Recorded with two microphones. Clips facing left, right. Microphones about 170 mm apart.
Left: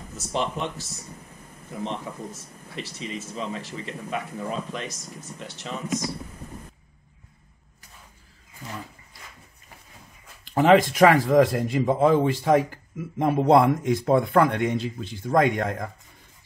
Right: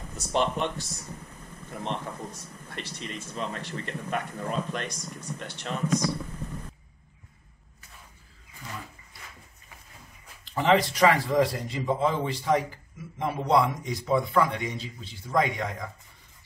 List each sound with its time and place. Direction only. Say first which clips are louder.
0.1 s speech: right 1 dB; centre (ahead or behind)
2.7 s speech: left 4 dB; centre (ahead or behind)
10.5 s a man's voice: left 6 dB; 50° left (ahead or behind)